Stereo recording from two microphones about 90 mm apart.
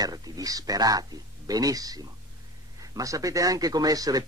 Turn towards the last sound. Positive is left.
turn(degrees=-45)  # may be behind; listen again after turning